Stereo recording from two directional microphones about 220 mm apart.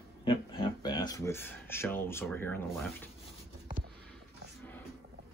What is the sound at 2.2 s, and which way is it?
Speech, 10° left (ahead or behind).